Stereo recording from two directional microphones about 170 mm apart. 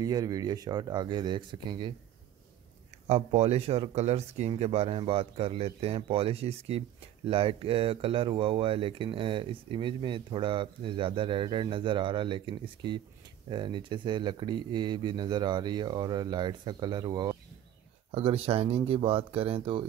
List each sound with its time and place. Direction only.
0.0 s speech: 20° right (ahead or behind)
3.1 s speech: 40° right (ahead or behind); by 17.4 s 25° right (ahead or behind)
18.1 s speech: 35° right (ahead or behind)